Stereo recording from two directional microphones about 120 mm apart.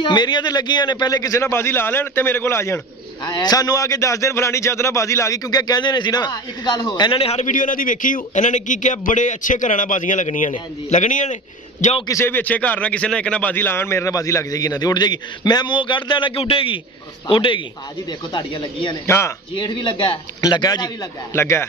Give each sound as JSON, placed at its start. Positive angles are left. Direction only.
{"t": 0.0, "sound": "speech", "side_deg": 40}
{"t": 3.3, "sound": "speech", "side_deg": 35}
{"t": 7.4, "sound": "a man's voice", "side_deg": 90}
{"t": 12.1, "sound": "speech", "side_deg": 20}
{"t": 19.0, "sound": "speech", "side_deg": 20}
{"t": 19.5, "sound": "speech", "side_deg": 40}
{"t": 21.3, "sound": "speech", "side_deg": 20}